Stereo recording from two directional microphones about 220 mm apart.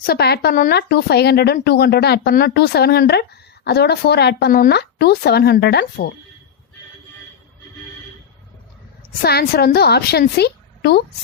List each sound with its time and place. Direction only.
0.0 s speech: 45° left (ahead or behind)
9.2 s speech: 45° left (ahead or behind)